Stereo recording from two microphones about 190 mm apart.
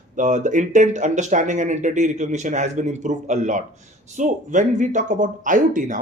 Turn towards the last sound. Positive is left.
turn(degrees=-45)  # may be behind; listen again after turning